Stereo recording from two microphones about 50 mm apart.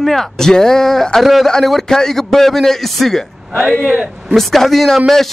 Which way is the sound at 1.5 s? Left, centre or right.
Centre.